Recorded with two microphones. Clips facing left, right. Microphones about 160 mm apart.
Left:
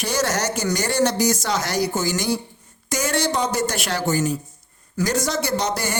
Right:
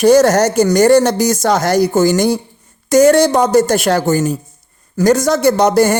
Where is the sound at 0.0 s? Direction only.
45° right (ahead or behind).